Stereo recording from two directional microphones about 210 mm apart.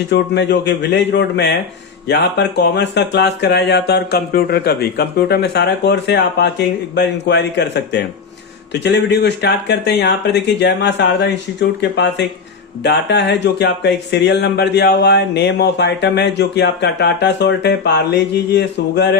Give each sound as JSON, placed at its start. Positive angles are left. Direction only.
{"t": 0.1, "sound": "speech", "side_deg": 55}